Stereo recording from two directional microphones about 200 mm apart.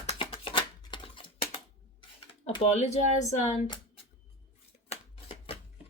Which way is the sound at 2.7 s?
35° left (ahead or behind).